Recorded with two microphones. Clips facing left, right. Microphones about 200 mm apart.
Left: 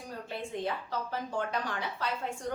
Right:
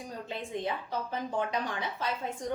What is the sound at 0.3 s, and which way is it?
A woman's voice, 20° right (ahead or behind).